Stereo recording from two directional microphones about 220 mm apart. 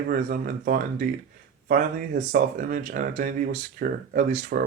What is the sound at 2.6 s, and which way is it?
Speech, 40° right (ahead or behind).